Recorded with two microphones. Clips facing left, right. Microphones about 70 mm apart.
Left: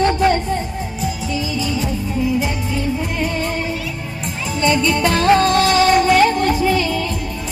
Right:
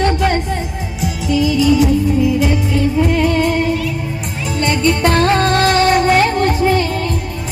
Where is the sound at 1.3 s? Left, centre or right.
Right.